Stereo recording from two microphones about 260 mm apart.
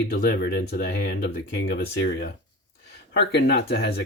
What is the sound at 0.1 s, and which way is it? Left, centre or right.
Speech, left.